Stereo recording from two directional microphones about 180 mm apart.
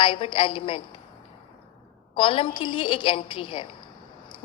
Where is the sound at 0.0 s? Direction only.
30° left (ahead or behind).